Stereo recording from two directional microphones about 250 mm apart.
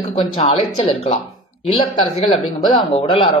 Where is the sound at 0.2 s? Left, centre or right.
Left.